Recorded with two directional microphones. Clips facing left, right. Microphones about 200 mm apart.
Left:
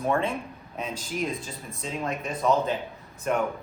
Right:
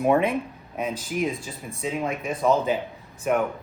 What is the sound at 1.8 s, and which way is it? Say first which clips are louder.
Speech: right 4 dB; 10° right (ahead or behind).